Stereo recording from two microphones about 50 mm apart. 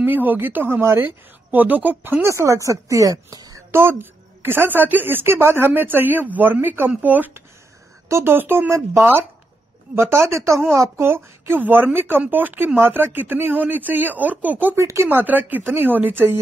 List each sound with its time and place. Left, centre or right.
0.0 s speech: right
0.7 s speech: right
1.5 s speech: right
2.2 s speech: right
3.7 s a woman's voice: right
8.1 s a woman's voice: right
8.6 s speech: right
10.7 s speech: right
11.6 s a woman's voice: right
14.8 s speech: right
15.0 s speech: right